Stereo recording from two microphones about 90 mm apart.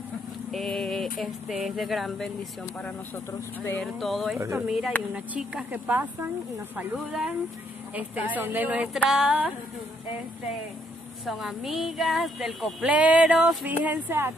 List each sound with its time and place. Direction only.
0.5 s a sound: centre (ahead or behind)
1.7 s speech: centre (ahead or behind)
3.8 s speech: centre (ahead or behind); by 8.8 s 20° right (ahead or behind)
8.8 s speech: 5° right (ahead or behind)
11.2 s speech: centre (ahead or behind)
12.8 s speech: 15° right (ahead or behind)
13.7 s speech: 20° right (ahead or behind)